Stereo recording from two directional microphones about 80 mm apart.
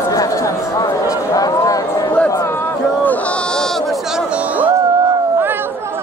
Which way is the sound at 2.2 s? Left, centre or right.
Left.